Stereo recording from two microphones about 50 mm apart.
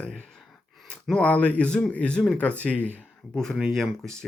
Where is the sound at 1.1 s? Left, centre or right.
Left.